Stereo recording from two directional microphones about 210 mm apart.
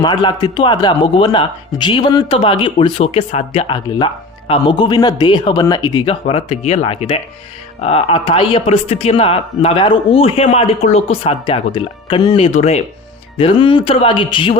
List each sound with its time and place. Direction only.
0.0 s speech: 20° left (ahead or behind)